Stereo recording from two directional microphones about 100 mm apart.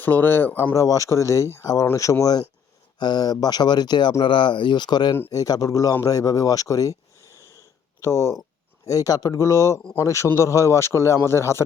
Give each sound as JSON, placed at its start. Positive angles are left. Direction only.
{"t": 0.0, "sound": "a man's voice", "side_deg": 20}
{"t": 0.7, "sound": "a man's voice", "side_deg": 35}